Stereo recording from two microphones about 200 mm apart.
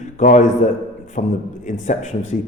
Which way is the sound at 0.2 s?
40° left (ahead or behind).